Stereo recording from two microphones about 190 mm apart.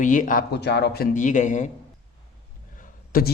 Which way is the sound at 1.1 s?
40° left (ahead or behind).